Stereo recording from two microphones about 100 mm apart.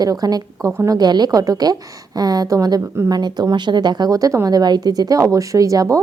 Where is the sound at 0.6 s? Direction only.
25° right (ahead or behind).